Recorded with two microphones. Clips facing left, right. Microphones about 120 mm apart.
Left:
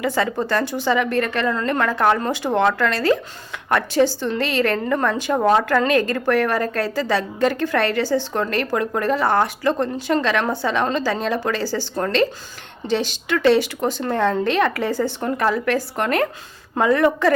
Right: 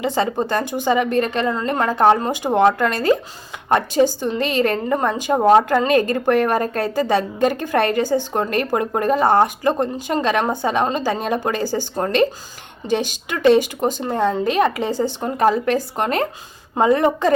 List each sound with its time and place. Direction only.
0.0 s speech: 25° right (ahead or behind)
2.3 s speech: 15° right (ahead or behind)
5.3 s speech: 30° right (ahead or behind)